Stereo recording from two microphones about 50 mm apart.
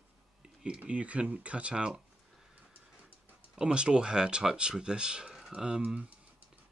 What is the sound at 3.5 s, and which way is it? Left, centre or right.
Speech, centre.